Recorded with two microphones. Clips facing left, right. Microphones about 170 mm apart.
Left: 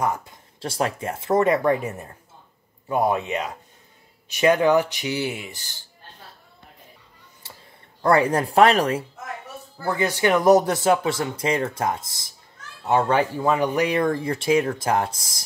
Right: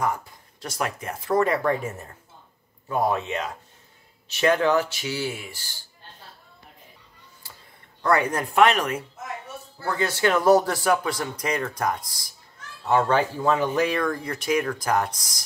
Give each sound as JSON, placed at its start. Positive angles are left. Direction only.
{"t": 0.0, "sound": "speech", "side_deg": 20}
{"t": 7.4, "sound": "clicking", "side_deg": 25}
{"t": 8.0, "sound": "speech", "side_deg": 30}
{"t": 9.8, "sound": "speech", "side_deg": 15}